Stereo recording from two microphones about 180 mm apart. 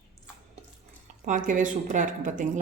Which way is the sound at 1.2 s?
45° right (ahead or behind).